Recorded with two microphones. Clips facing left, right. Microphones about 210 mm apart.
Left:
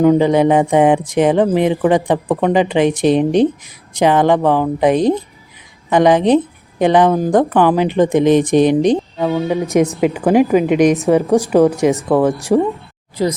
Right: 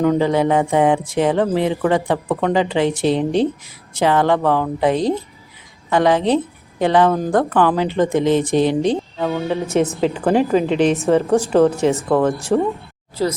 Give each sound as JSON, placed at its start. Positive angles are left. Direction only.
{"t": 0.0, "sound": "a woman's voice", "side_deg": 15}